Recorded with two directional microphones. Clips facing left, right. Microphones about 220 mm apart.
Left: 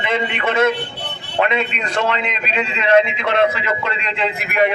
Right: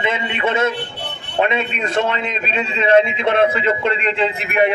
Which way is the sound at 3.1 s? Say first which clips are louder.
Right 1 dB; 25° right (ahead or behind).